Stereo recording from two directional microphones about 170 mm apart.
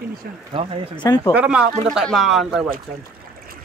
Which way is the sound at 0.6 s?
30° right (ahead or behind).